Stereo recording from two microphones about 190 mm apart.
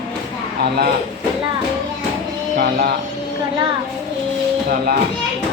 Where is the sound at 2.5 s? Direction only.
55° right (ahead or behind).